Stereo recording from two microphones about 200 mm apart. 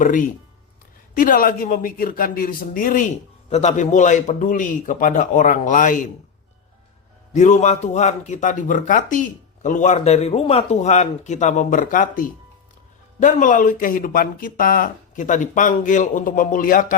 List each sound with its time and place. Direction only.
0.0 s speech: 40° left (ahead or behind)
7.3 s speech: 35° left (ahead or behind)